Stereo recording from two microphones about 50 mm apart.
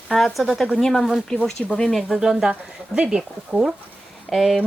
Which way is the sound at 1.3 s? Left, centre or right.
Left.